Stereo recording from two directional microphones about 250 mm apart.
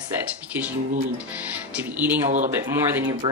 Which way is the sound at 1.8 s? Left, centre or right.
Centre.